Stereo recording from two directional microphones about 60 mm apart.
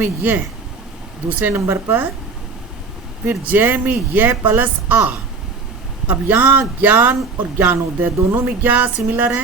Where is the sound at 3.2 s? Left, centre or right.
Right.